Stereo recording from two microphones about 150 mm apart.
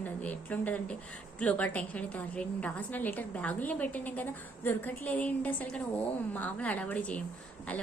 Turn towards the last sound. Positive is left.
turn(degrees=5)  # may be behind; listen again after turning